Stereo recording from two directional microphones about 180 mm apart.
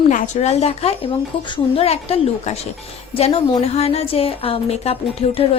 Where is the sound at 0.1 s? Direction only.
40° left (ahead or behind).